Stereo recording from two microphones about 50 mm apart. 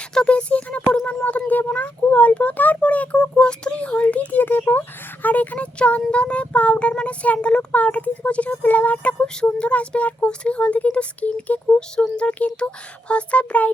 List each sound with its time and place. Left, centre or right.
0.3 s a child's voice: left